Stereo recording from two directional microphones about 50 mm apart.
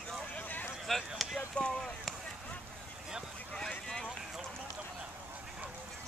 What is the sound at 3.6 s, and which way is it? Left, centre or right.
Vehicle, centre.